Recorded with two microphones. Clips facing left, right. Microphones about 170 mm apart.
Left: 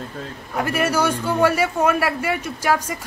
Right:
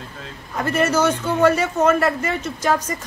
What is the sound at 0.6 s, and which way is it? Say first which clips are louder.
Speech: right 2 dB; 10° left (ahead or behind).